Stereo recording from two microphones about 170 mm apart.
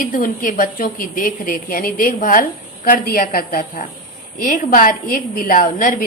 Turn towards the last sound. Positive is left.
turn(degrees=50)  # may be behind; listen again after turning